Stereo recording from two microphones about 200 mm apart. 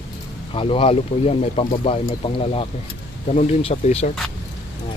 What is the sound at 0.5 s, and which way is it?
Speech, 25° left (ahead or behind).